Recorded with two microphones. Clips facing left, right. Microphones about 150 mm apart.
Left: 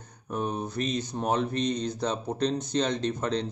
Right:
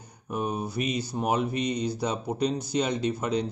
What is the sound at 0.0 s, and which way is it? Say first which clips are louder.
Speech: right 1 dB; 10° right (ahead or behind).